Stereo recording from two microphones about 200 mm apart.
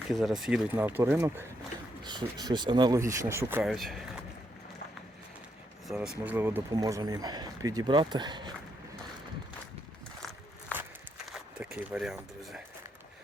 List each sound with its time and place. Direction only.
0.1 s speech: centre (ahead or behind)
3.6 s speech: centre (ahead or behind)
5.9 s speech: 5° right (ahead or behind); by 8.5 s 20° right (ahead or behind)
11.3 s speech: 5° right (ahead or behind)